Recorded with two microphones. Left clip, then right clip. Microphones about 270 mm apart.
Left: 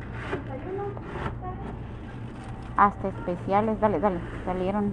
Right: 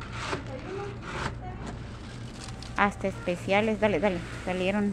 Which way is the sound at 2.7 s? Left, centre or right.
Right.